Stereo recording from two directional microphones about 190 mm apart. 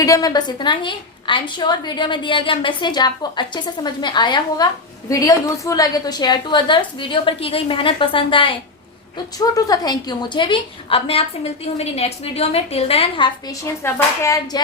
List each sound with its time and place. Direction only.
0.0 s a woman's voice: 20° left (ahead or behind)
13.8 s speech: 15° left (ahead or behind)